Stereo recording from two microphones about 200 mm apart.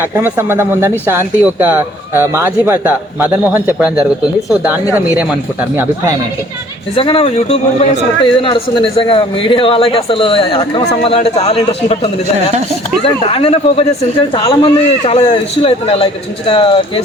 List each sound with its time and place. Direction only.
0.2 s speech: 10° right (ahead or behind)
6.9 s a man's voice: 25° left (ahead or behind)
13.2 s a man's voice: 30° left (ahead or behind)